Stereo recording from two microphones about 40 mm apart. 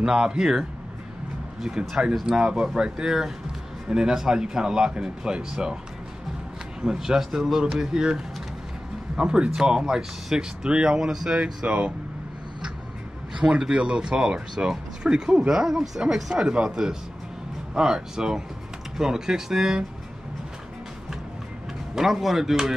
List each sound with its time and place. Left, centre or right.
0.0 s speech: centre
2.2 s speech: centre
6.8 s speech: centre
11.6 s speech: right
13.4 s speech: right
13.7 s speech: right
21.9 s speech: centre